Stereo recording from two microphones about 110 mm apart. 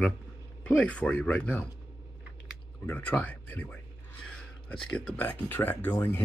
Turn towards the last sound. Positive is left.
turn(degrees=20)  # may be behind; listen again after turning